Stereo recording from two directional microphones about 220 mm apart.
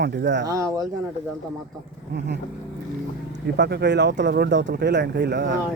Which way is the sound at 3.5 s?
50° right (ahead or behind).